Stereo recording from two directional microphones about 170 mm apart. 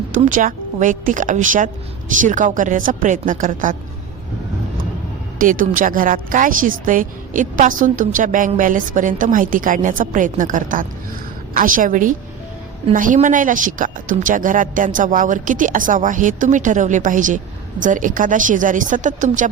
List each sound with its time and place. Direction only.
0.1 s speech: 50° right (ahead or behind)
5.4 s speech: 55° right (ahead or behind)